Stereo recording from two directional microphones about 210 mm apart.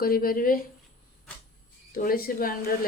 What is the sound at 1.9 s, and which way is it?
Speech, 40° left (ahead or behind).